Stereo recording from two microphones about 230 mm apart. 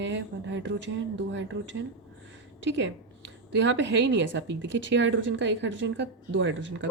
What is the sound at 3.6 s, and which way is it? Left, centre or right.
A woman's voice, right.